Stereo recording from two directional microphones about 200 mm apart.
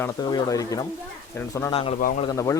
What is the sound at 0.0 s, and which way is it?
Speech, 20° left (ahead or behind).